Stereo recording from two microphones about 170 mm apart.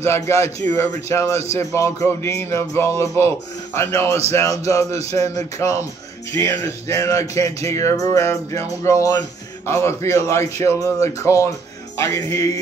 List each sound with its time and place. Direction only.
0.0 s music: 15° left (ahead or behind)
1.3 s speech: 40° right (ahead or behind)
1.7 s music: 15° left (ahead or behind)